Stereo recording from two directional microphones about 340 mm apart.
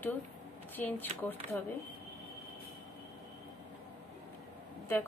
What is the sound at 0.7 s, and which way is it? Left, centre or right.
Speech, centre.